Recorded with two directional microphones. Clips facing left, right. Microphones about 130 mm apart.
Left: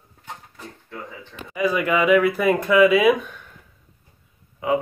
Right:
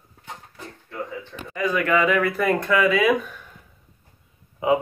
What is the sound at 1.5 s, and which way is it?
Speech, 10° left (ahead or behind).